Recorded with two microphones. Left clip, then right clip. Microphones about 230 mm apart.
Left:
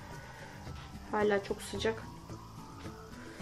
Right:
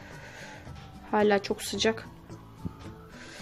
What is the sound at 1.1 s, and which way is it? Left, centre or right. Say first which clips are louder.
Speech: right 6 dB; right.